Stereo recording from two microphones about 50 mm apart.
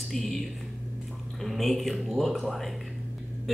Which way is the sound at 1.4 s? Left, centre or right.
Centre.